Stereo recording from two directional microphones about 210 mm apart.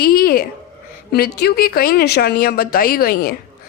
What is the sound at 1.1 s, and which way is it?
A woman's voice, 50° left (ahead or behind).